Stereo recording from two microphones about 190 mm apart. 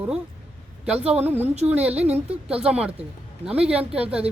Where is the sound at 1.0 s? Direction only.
35° right (ahead or behind).